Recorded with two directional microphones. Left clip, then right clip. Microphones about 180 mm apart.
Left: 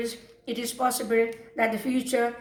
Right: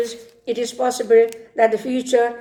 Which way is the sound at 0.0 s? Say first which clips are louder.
Right 9 dB; 50° right (ahead or behind).